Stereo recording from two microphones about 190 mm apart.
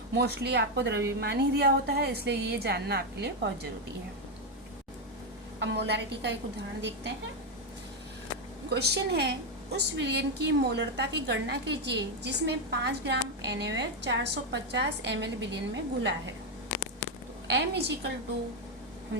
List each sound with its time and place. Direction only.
0.1 s a woman's voice: 60° right (ahead or behind)
5.5 s a woman's voice: 65° right (ahead or behind)
8.7 s a woman's voice: 60° right (ahead or behind)
17.5 s a woman's voice: 65° right (ahead or behind)